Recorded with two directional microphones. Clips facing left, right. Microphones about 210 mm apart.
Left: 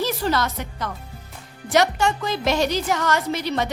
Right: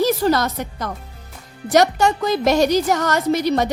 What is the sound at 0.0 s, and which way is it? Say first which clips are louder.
A woman's voice: right 6 dB; 40° right (ahead or behind).